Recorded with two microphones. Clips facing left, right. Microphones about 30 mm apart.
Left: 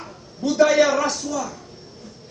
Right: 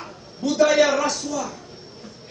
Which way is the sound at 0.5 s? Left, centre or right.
Centre.